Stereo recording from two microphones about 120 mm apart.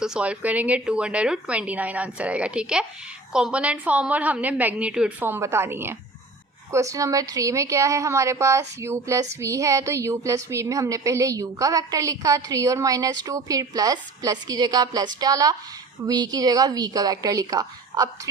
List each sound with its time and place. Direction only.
0.0 s a woman's voice: 5° right (ahead or behind); by 18.1 s 30° right (ahead or behind)